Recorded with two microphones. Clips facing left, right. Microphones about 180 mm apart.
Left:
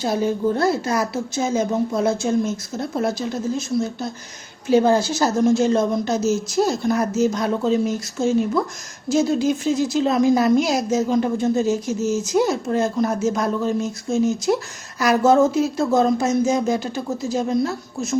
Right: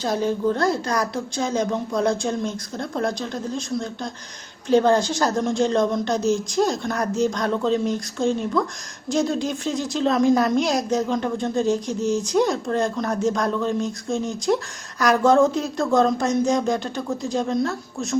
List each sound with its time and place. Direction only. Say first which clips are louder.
0.0 s a woman's voice: left 1 dB; 10° left (ahead or behind)